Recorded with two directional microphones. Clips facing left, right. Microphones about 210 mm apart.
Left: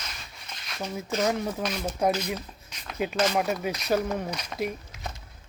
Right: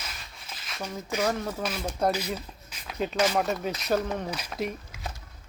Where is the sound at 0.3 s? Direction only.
5° right (ahead or behind).